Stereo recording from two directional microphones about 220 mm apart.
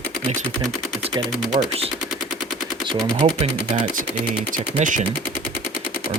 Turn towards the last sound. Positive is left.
turn(degrees=-35)  # may be behind; listen again after turning